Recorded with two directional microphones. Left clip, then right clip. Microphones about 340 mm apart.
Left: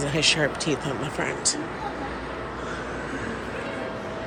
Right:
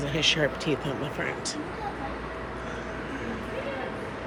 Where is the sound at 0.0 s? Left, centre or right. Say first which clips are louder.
Left 2 dB; centre.